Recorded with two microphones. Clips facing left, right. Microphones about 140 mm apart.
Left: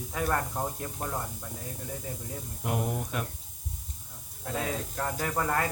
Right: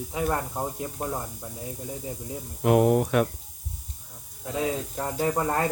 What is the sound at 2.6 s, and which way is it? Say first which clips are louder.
Speech: right 12 dB; 80° right.